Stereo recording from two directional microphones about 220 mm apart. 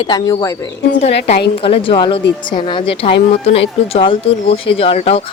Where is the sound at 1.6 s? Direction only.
25° left (ahead or behind).